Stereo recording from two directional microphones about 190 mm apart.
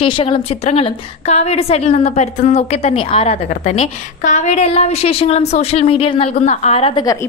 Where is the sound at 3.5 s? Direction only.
40° left (ahead or behind).